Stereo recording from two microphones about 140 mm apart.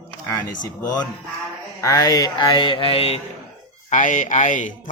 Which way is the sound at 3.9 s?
65° left (ahead or behind).